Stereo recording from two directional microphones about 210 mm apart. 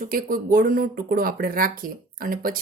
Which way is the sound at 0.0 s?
40° right (ahead or behind).